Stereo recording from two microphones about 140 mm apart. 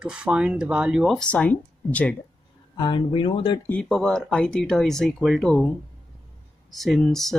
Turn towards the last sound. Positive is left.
turn(degrees=0)  # may be behind; listen again after turning